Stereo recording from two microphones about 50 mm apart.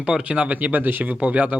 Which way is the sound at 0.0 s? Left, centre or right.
Right.